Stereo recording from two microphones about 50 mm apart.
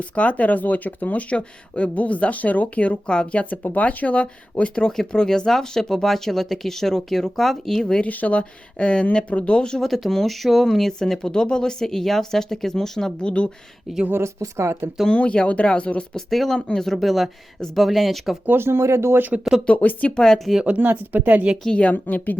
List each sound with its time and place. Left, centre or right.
0.0 s speech: left; by 8.0 s centre
8.0 s speech: left
9.8 s speech: centre
13.2 s speech: left
14.1 s speech: right
15.1 s speech: left
16.1 s speech: centre
18.4 s speech: right
19.6 s speech: left
20.2 s speech: centre
20.7 s speech: right
21.7 s a woman's voice: left